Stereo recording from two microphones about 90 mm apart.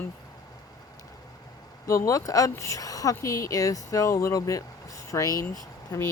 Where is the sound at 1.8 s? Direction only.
40° left (ahead or behind).